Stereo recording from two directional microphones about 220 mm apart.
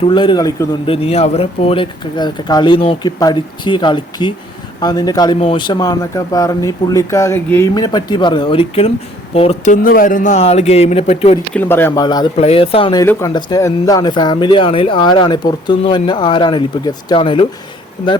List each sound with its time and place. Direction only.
0.0 s a man's voice: 20° left (ahead or behind)
11.5 s speech: 10° left (ahead or behind)